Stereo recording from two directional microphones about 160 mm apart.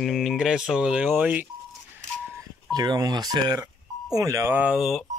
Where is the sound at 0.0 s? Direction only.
Centre (ahead or behind).